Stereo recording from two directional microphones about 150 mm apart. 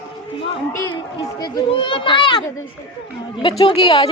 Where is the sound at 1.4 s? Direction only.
30° left (ahead or behind).